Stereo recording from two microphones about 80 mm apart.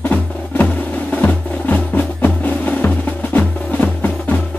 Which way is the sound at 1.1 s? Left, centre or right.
Centre.